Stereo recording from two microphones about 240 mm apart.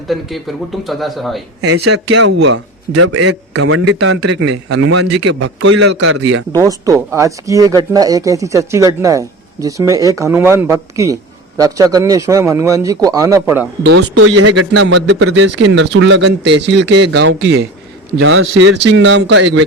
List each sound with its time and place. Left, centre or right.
0.1 s speech: centre
1.6 s a man's voice: right
6.5 s speech: centre
14.2 s a man's voice: right